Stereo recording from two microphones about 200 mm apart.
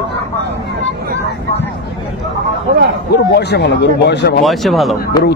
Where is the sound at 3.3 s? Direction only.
55° left (ahead or behind).